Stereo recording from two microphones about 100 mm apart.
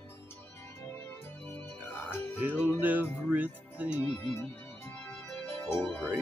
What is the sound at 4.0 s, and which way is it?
Music, 15° left (ahead or behind).